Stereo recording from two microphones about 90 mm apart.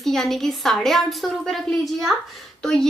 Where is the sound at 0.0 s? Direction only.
5° left (ahead or behind).